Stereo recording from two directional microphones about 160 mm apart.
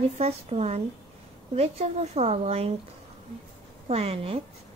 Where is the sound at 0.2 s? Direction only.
40° right (ahead or behind).